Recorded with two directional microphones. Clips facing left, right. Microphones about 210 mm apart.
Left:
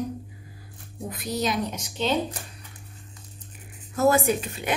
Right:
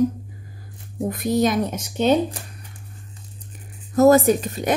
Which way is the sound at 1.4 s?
50° right (ahead or behind).